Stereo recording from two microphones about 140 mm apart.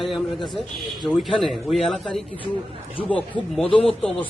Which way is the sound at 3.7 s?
45° left (ahead or behind).